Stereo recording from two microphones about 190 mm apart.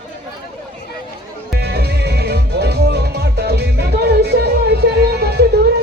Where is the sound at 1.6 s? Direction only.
60° right (ahead or behind).